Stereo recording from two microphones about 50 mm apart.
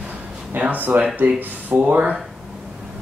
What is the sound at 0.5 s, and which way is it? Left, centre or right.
Speech, right.